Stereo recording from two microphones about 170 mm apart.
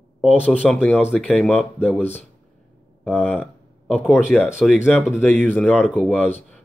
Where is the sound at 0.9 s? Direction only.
Centre (ahead or behind).